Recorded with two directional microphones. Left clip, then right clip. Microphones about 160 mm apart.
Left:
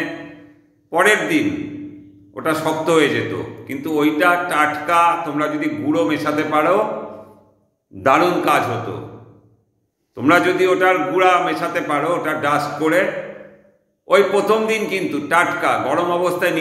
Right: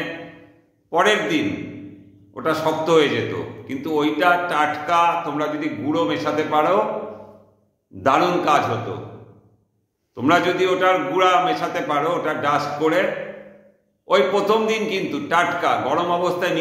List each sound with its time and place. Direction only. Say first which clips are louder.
0.8 s a man's voice: left 3 dB; 5° right (ahead or behind)
8.0 s a man's voice: left 3 dB; 5° right (ahead or behind)
10.1 s a man's voice: left 3 dB; 5° right (ahead or behind)
14.0 s a man's voice: left 3 dB; 5° right (ahead or behind)